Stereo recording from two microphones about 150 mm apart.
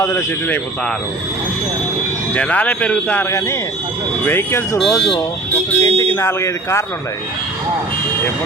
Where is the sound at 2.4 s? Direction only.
10° left (ahead or behind).